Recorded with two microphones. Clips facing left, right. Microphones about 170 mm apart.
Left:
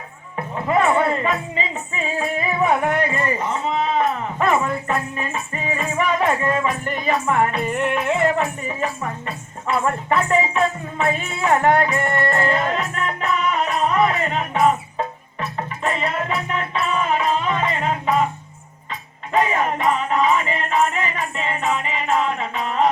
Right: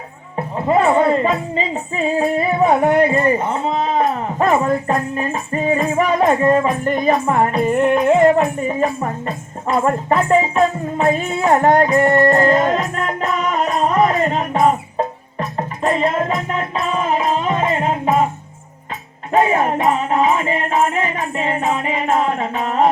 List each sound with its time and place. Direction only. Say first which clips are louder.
0.3 s music: right 4 dB; 25° right (ahead or behind)
0.9 s speech: right 5 dB; 25° right (ahead or behind)
6.3 s music: right 7 dB; 35° right (ahead or behind)
19.3 s music: right 4 dB; 40° right (ahead or behind)